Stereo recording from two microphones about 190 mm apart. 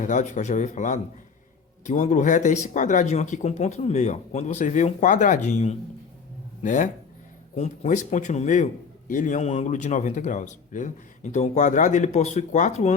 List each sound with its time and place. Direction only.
0.0 s a man's voice: 40° left (ahead or behind)